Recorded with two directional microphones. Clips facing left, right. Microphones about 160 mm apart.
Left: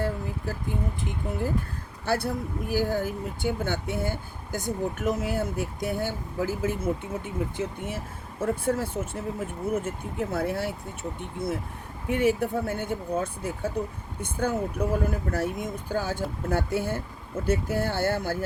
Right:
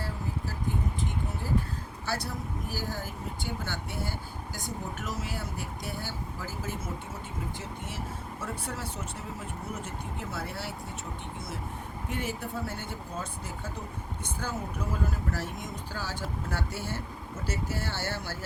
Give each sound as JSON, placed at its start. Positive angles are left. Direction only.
{"t": 2.0, "sound": "speech", "side_deg": 55}